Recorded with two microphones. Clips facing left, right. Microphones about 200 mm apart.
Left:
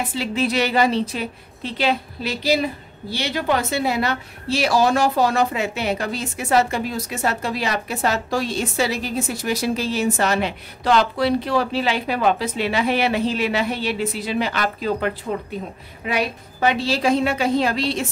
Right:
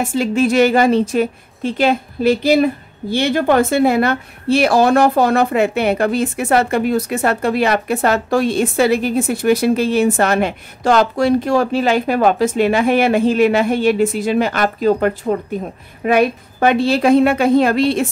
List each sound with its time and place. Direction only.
0.0 s a woman's voice: 45° right (ahead or behind)